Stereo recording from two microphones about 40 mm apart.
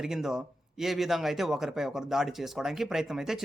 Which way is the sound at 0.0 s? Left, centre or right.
Centre.